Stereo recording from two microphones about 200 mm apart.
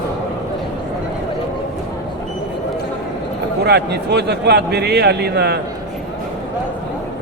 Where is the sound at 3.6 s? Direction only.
55° right (ahead or behind).